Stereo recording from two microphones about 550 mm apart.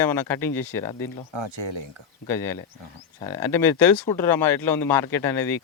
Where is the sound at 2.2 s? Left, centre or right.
Centre.